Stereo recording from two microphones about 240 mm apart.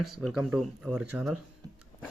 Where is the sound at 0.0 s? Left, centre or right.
Centre.